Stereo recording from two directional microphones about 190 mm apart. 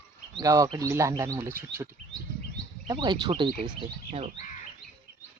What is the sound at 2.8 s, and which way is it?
Speech, 25° right (ahead or behind).